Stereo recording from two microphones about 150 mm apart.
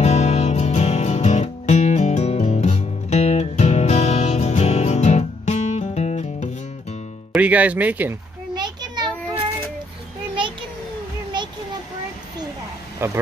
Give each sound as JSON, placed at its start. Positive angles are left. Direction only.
{"t": 0.0, "sound": "music", "side_deg": 45}
{"t": 7.3, "sound": "speech", "side_deg": -10}
{"t": 8.5, "sound": "children playing", "side_deg": -30}
{"t": 13.0, "sound": "speech", "side_deg": -15}